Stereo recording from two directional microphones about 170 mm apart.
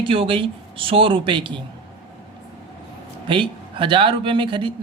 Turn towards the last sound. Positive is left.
turn(degrees=-30)  # may be behind; listen again after turning